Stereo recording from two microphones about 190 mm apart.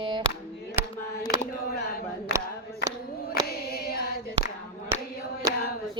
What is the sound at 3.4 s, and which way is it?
Choir, 55° left (ahead or behind).